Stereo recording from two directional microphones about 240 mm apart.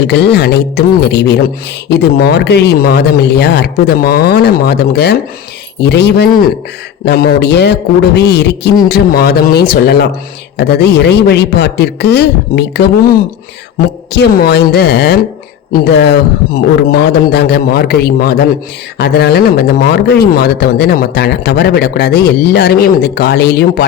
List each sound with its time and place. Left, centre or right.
0.0 s a man's voice: left